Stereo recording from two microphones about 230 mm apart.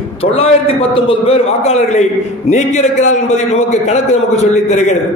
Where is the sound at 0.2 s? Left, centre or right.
Left.